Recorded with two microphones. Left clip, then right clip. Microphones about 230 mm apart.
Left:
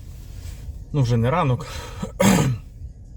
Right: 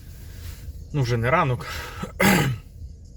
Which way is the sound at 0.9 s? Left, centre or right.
Centre.